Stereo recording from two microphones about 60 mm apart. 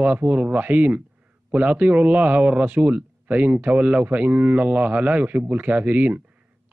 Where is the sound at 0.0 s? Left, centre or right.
Right.